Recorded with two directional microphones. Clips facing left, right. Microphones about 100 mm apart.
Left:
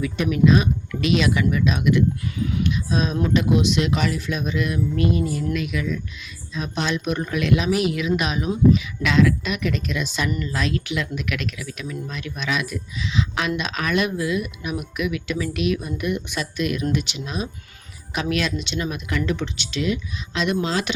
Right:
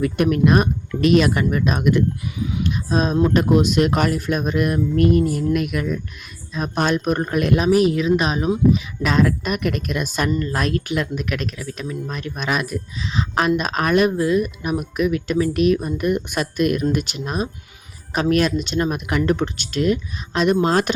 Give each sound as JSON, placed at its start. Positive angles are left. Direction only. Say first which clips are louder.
{"t": 0.0, "sound": "speech", "louder": "right 2 dB", "side_deg": -50}
{"t": 2.2, "sound": "a sound", "louder": "even", "side_deg": -20}
{"t": 2.6, "sound": "speech", "louder": "right 6 dB", "side_deg": -40}